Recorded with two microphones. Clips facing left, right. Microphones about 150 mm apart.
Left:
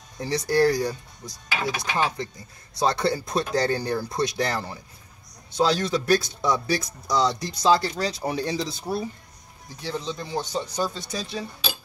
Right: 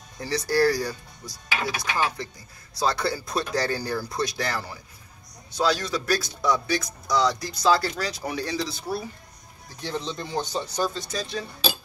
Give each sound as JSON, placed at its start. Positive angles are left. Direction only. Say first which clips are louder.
{"t": 0.2, "sound": "speech", "louder": "left 1 dB", "side_deg": 20}
{"t": 9.8, "sound": "speech", "louder": "even", "side_deg": 10}